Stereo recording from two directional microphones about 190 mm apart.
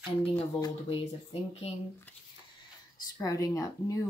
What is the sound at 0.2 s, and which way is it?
Speech, 30° left (ahead or behind).